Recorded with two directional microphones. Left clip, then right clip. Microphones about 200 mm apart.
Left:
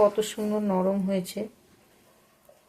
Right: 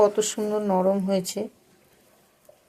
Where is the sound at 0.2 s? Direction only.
25° right (ahead or behind).